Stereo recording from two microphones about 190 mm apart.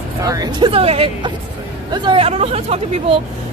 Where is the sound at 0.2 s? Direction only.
20° right (ahead or behind).